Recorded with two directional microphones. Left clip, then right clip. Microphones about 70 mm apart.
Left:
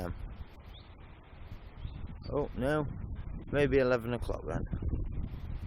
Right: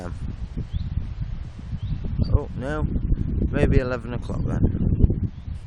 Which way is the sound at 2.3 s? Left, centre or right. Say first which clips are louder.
Right 1 dB; left.